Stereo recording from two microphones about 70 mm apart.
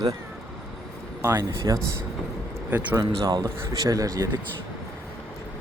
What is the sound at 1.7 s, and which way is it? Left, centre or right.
Speech, right.